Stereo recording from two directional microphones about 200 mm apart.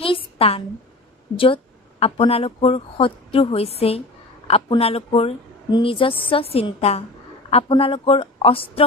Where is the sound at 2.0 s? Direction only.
30° left (ahead or behind).